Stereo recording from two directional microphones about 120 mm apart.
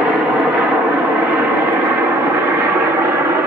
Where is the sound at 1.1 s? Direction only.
15° right (ahead or behind).